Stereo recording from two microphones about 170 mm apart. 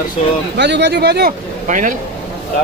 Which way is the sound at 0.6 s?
85° right.